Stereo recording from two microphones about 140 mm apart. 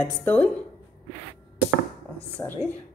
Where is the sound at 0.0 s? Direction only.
15° left (ahead or behind).